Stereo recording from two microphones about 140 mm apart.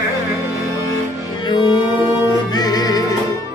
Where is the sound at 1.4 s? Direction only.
35° left (ahead or behind).